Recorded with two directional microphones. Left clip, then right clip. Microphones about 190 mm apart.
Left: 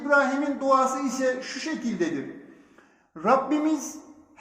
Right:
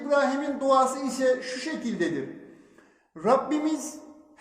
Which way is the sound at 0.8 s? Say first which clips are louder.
Right 1 dB; 15° right (ahead or behind).